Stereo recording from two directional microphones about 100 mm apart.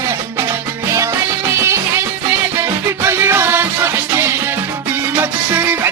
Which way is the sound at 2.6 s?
25° right (ahead or behind).